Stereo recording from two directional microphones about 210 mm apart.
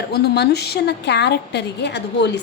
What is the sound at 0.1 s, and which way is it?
A woman's voice, 50° left (ahead or behind).